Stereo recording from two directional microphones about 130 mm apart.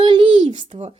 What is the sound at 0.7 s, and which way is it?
Speech, 55° right (ahead or behind).